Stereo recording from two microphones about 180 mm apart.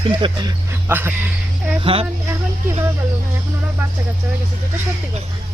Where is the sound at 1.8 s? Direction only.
30° right (ahead or behind).